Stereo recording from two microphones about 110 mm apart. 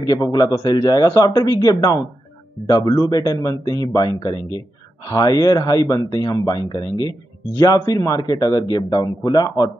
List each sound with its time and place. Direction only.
0.0 s speech: 35° left (ahead or behind)